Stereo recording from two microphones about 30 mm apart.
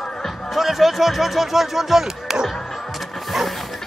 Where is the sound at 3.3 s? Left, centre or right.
Centre.